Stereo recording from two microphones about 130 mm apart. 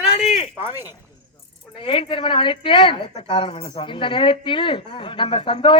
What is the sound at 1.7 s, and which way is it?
Speech, 40° left (ahead or behind).